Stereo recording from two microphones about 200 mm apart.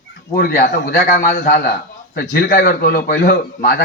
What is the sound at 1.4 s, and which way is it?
A man's voice, 45° left (ahead or behind).